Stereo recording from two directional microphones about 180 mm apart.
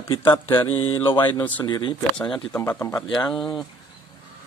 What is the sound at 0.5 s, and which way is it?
Speech, 30° left (ahead or behind).